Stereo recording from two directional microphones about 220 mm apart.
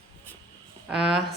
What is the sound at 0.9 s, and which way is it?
Speech, centre (ahead or behind).